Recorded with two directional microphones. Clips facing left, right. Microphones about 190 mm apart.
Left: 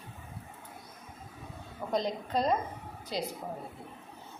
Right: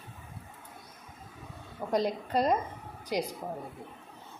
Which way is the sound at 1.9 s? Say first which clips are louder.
Right 2 dB; 10° right (ahead or behind).